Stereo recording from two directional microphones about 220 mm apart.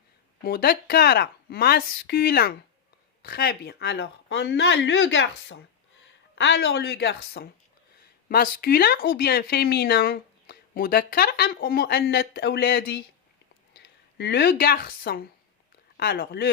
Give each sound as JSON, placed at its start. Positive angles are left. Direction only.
{"t": 0.4, "sound": "speech", "side_deg": 45}